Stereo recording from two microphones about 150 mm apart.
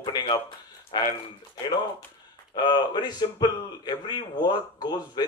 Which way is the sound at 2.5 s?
30° left (ahead or behind).